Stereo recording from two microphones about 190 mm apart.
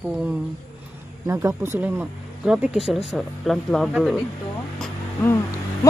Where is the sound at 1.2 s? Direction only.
15° right (ahead or behind).